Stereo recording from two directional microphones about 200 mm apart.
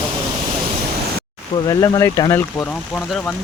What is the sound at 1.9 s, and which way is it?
Speech, 15° left (ahead or behind).